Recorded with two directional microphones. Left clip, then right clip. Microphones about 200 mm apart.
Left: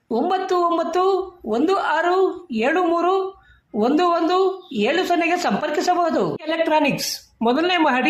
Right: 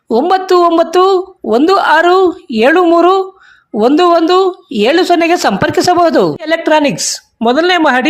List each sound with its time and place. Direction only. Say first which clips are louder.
0.1 s speech: right 11 dB; 45° right (ahead or behind)